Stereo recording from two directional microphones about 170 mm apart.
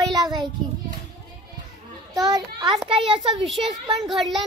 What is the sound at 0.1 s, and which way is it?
Child singing, 25° right (ahead or behind).